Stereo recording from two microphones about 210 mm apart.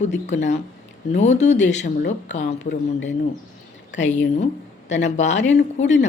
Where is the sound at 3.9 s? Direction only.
35° left (ahead or behind).